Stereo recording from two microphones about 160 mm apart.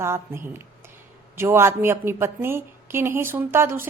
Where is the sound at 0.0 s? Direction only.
15° right (ahead or behind).